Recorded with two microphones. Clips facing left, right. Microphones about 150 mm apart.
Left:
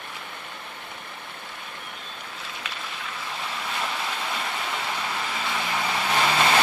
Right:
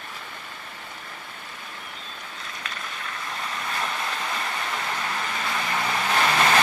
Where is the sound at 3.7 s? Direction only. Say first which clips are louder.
Even; 5° left (ahead or behind).